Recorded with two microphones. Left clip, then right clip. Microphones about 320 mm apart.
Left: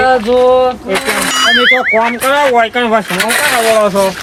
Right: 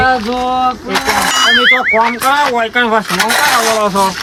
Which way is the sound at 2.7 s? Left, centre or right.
Right.